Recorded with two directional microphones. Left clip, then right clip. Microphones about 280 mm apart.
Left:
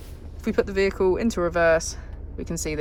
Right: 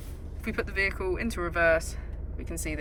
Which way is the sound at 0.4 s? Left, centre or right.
Centre.